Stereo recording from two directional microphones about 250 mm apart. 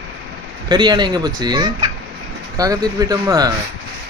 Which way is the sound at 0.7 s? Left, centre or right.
Centre.